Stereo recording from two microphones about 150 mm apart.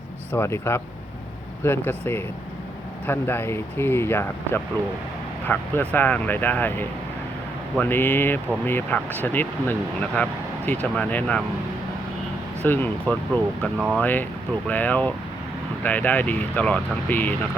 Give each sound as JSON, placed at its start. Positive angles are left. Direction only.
{"t": 0.3, "sound": "speech", "side_deg": 15}
{"t": 12.6, "sound": "speech", "side_deg": 10}
{"t": 13.7, "sound": "speech", "side_deg": -5}
{"t": 14.0, "sound": "speech", "side_deg": 10}